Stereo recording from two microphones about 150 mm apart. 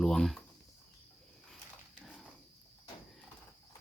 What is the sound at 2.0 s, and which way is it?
Horse, centre (ahead or behind).